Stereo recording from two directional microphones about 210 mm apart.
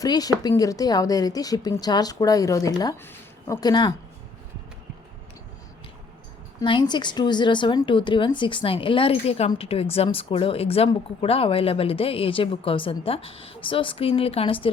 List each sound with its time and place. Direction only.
0.0 s a woman's voice: 15° left (ahead or behind)
6.6 s speech: 20° left (ahead or behind)